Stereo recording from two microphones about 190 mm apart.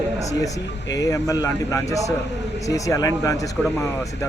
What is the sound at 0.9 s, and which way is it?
Speech, 15° left (ahead or behind).